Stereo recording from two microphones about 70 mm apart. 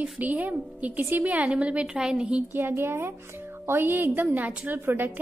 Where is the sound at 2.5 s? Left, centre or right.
Right.